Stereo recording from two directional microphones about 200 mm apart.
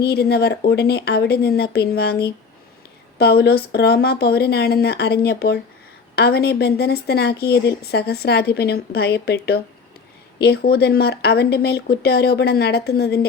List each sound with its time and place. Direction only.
0.0 s speech: 55° left (ahead or behind)